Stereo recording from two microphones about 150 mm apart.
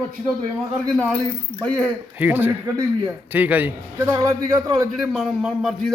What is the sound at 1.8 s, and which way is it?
A man's voice, 10° right (ahead or behind).